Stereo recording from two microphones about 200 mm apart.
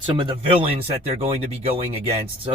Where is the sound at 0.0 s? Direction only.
25° right (ahead or behind).